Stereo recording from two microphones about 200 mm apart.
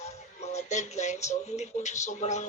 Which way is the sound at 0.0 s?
35° left (ahead or behind).